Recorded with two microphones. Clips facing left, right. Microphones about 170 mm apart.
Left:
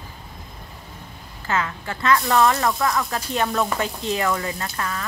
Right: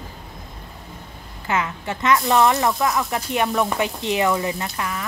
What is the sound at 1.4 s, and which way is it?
Speech, 20° right (ahead or behind).